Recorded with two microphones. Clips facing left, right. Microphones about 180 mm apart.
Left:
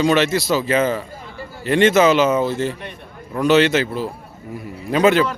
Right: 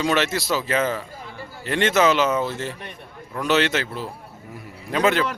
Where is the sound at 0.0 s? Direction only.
Centre (ahead or behind).